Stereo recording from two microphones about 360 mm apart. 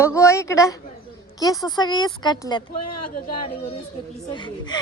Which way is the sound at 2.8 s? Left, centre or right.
Left.